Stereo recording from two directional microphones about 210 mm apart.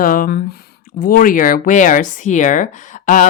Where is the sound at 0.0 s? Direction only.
40° left (ahead or behind).